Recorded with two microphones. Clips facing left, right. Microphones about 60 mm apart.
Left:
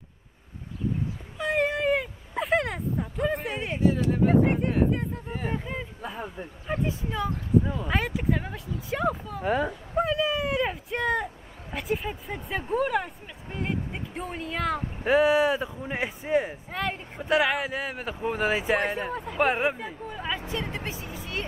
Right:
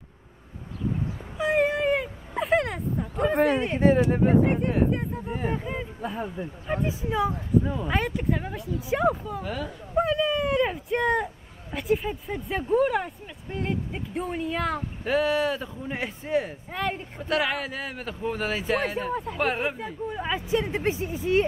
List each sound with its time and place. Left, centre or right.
1.4 s a sound: centre
4.3 s speech: centre
9.4 s speech: left
9.9 s speech: centre
15.0 s speech: centre
16.7 s speech: centre
17.2 s speech: centre
20.1 s speech: centre
20.5 s speech: right